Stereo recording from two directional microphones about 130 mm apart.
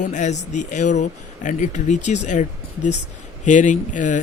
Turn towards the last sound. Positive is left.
turn(degrees=75)  # may be behind; listen again after turning